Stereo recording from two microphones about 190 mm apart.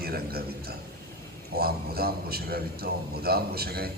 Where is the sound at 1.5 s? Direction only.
55° right (ahead or behind).